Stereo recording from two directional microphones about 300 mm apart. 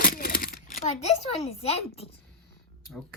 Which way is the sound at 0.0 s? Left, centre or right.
Left.